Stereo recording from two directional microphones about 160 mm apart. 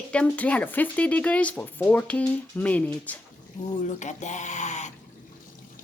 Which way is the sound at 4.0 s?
50° left (ahead or behind).